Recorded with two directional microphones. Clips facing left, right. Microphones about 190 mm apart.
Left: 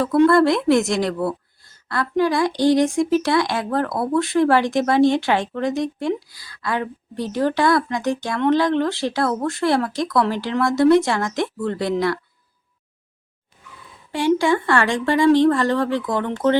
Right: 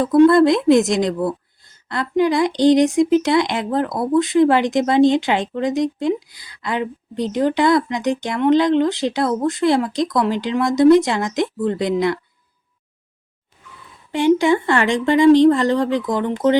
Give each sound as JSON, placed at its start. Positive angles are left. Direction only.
{"t": 0.0, "sound": "a woman's voice", "side_deg": -20}
{"t": 14.1, "sound": "a woman's voice", "side_deg": -20}